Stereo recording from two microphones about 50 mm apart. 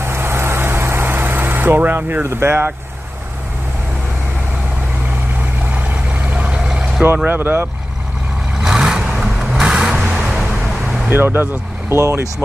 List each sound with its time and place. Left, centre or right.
0.0 s vehicle: right
2.2 s speech: right
5.8 s vehicle: right
7.3 s speech: right
8.6 s vehicle: centre
11.1 s speech: right
11.9 s speech: right